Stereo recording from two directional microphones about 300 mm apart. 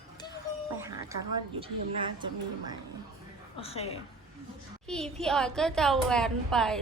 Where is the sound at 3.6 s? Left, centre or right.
Centre.